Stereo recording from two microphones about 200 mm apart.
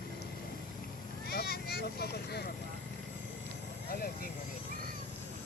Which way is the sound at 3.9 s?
45° left (ahead or behind).